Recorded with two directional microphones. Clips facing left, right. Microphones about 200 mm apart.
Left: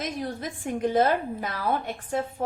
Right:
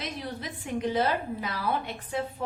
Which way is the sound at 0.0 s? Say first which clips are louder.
Left 4 dB; 50° left (ahead or behind).